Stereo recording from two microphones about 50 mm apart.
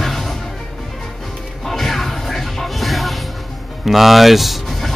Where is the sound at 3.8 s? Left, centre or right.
Centre.